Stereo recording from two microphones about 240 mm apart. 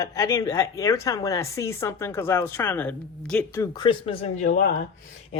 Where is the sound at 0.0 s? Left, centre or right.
Centre.